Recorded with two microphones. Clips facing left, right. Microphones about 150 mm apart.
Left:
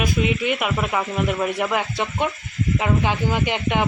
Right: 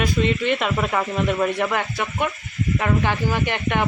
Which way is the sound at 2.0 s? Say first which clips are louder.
Left 1 dB; 20° left (ahead or behind).